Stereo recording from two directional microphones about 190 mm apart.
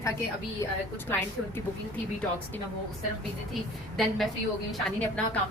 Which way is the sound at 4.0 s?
Centre (ahead or behind).